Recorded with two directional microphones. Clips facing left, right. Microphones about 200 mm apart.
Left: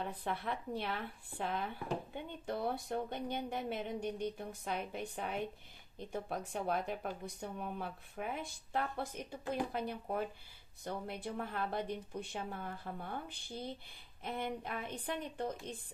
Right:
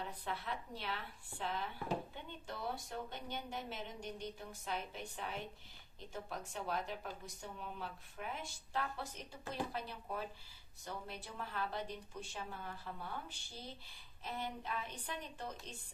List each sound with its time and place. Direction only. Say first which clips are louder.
0.0 s speech: left 5 dB; 55° left (ahead or behind)